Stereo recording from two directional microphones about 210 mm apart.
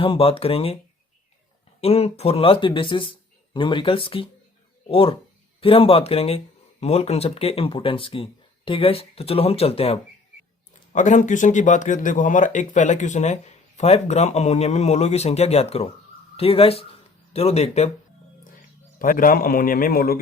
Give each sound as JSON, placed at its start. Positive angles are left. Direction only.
{"t": 0.0, "sound": "speech", "side_deg": 25}
{"t": 1.8, "sound": "speech", "side_deg": 30}
{"t": 18.9, "sound": "speech", "side_deg": 40}